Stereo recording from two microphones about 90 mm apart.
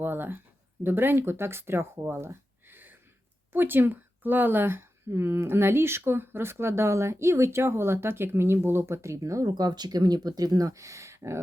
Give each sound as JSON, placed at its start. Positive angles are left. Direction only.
{"t": 0.0, "sound": "speech", "side_deg": -25}